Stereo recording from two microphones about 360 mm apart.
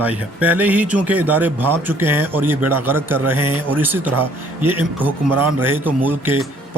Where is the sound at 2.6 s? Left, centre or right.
Right.